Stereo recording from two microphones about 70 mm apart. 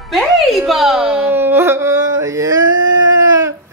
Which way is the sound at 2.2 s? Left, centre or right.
Right.